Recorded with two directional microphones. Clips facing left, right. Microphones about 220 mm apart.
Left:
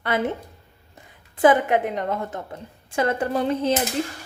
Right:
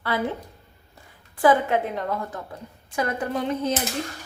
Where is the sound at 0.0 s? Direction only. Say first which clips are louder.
Left 2 dB; 20° left (ahead or behind).